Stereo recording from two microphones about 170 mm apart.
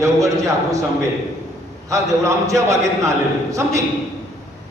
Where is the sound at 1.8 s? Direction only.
20° right (ahead or behind).